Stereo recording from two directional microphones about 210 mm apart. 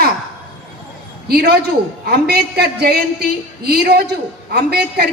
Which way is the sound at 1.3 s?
50° right (ahead or behind).